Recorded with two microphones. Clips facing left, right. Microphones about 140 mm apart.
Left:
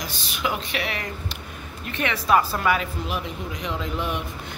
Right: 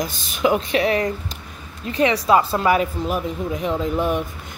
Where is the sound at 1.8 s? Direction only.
30° right (ahead or behind).